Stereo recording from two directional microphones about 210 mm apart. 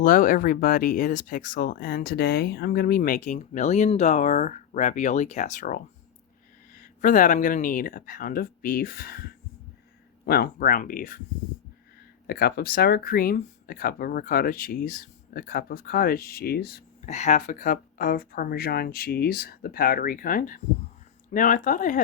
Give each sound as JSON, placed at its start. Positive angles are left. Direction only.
{"t": 0.0, "sound": "speech", "side_deg": 40}
{"t": 10.2, "sound": "speech", "side_deg": 45}
{"t": 12.3, "sound": "speech", "side_deg": 45}
{"t": 17.0, "sound": "speech", "side_deg": 30}